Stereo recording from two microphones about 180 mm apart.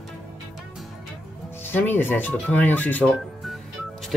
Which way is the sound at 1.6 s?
10° left (ahead or behind).